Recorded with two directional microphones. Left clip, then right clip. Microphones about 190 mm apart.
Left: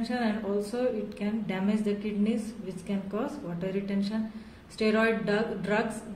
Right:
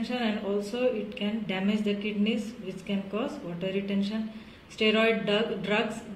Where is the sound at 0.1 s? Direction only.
Centre (ahead or behind).